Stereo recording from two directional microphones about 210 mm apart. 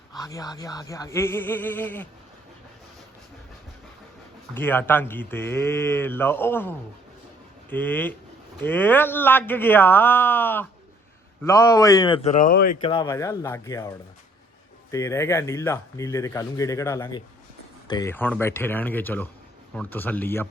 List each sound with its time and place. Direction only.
0.2 s speech: 15° left (ahead or behind)
4.5 s speech: 10° left (ahead or behind); by 12.7 s 45° left (ahead or behind)
12.8 s speech: 25° left (ahead or behind)
13.1 s speech: 15° left (ahead or behind)